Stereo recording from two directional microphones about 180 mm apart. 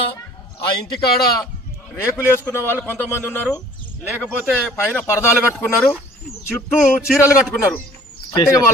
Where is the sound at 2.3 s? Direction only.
10° left (ahead or behind).